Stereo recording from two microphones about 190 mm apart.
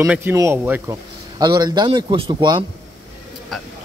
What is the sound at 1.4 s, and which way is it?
A man's voice, 20° right (ahead or behind).